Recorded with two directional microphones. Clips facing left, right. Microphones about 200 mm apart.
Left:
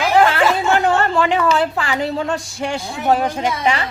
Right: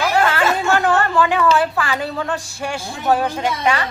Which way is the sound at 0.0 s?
15° left (ahead or behind).